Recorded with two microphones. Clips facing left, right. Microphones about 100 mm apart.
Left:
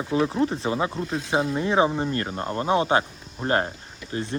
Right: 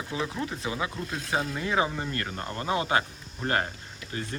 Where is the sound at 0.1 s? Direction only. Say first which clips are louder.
Left 10 dB; 35° left (ahead or behind).